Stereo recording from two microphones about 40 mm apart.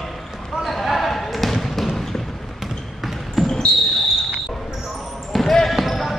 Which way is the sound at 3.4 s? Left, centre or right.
Centre.